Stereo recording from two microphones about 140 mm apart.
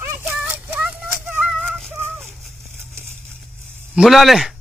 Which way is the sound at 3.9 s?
Centre (ahead or behind).